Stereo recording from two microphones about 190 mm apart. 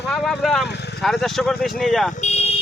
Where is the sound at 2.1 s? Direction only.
35° left (ahead or behind).